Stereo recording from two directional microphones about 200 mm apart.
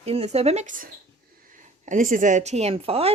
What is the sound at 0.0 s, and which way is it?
Speech, 30° right (ahead or behind).